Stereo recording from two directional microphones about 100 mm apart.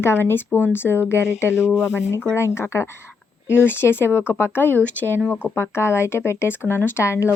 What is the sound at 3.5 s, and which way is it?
Speech, 20° left (ahead or behind).